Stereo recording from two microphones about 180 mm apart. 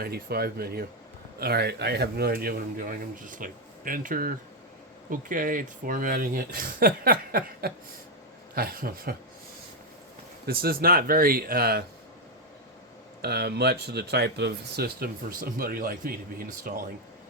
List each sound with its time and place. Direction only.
0.0 s speech: 60° right (ahead or behind)
10.4 s speech: 55° right (ahead or behind)
13.2 s speech: 65° right (ahead or behind)